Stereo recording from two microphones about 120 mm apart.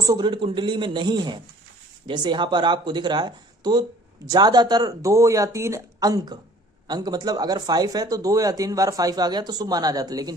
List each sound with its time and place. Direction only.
0.0 s speech: 35° right (ahead or behind)